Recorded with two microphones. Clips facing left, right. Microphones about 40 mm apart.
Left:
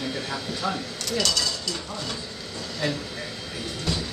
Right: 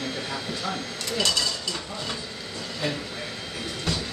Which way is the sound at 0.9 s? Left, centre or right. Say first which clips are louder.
Even; right.